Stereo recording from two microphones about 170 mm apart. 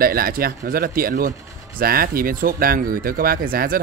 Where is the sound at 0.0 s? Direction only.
60° right (ahead or behind).